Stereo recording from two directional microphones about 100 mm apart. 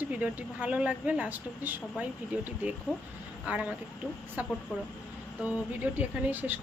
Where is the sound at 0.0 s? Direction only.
15° right (ahead or behind).